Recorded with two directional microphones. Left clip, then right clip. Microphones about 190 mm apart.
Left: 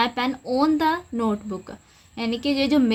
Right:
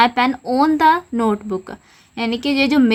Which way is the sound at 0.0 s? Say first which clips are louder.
Right 8 dB; 25° right (ahead or behind).